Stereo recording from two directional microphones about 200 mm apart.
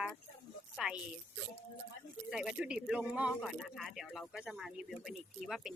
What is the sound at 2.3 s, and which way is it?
Speech, 5° right (ahead or behind).